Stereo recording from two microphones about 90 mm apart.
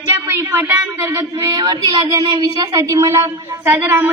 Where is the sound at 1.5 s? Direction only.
50° right (ahead or behind).